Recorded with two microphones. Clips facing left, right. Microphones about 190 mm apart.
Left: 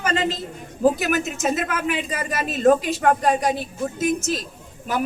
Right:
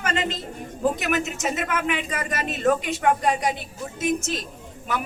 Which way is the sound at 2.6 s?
35° left (ahead or behind).